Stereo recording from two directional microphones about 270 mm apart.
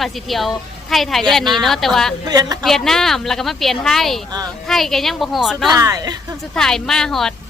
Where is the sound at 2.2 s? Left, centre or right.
Centre.